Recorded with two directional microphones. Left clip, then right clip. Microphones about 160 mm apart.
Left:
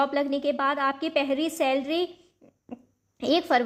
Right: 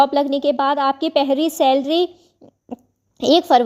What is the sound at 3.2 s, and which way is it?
Speech, 30° right (ahead or behind).